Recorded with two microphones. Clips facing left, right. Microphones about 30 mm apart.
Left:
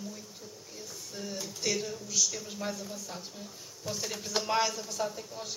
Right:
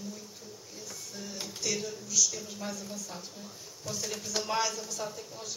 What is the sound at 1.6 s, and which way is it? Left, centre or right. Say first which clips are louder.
Speech: left 2 dB; left.